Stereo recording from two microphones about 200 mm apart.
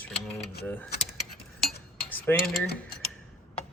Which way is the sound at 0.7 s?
5° left (ahead or behind).